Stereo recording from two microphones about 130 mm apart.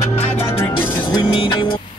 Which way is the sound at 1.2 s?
40° left (ahead or behind).